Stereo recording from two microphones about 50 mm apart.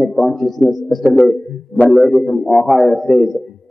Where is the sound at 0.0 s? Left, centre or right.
Centre.